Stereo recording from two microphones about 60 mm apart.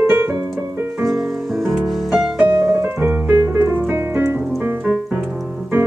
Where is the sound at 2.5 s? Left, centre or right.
Right.